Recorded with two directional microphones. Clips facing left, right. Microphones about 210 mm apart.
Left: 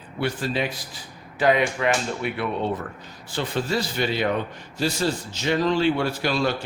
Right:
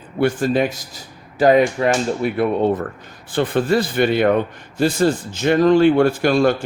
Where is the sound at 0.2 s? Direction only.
50° right (ahead or behind).